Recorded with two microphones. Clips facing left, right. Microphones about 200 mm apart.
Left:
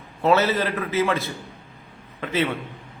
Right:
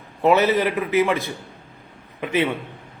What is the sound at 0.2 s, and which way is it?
A man's voice, 15° right (ahead or behind).